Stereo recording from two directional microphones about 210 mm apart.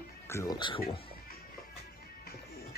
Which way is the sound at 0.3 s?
15° left (ahead or behind).